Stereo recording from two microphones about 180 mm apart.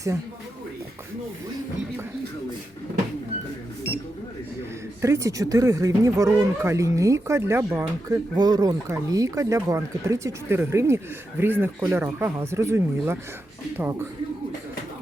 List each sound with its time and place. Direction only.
5.0 s speech: 15° right (ahead or behind)